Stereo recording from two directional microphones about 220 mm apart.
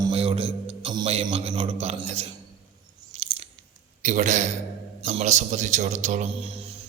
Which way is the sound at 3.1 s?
25° right (ahead or behind).